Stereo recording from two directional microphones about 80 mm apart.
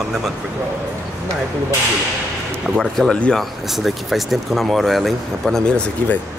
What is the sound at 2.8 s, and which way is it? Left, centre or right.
Speech, centre.